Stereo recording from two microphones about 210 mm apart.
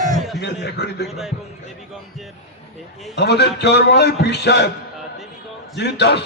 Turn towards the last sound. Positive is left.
turn(degrees=55)  # may be behind; listen again after turning